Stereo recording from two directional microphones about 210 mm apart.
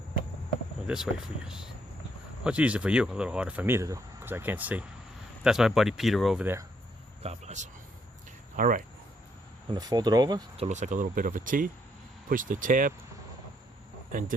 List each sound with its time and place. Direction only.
1.5 s speech: 5° right (ahead or behind)
7.2 s speech: 30° right (ahead or behind)
9.6 s speech: 20° right (ahead or behind)
10.7 s speech: 35° right (ahead or behind)
14.1 s speech: 40° right (ahead or behind)